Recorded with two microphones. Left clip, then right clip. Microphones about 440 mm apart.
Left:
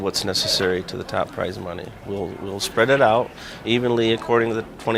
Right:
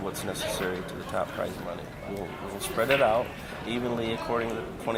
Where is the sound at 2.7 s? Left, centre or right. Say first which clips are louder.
Left 7 dB; left.